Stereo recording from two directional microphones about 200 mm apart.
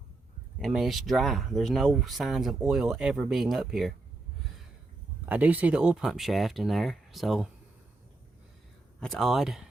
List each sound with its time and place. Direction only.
0.6 s speech: centre (ahead or behind)
5.2 s speech: 10° right (ahead or behind)
9.0 s speech: centre (ahead or behind)